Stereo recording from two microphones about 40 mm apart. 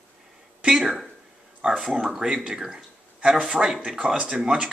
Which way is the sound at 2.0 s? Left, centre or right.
Centre.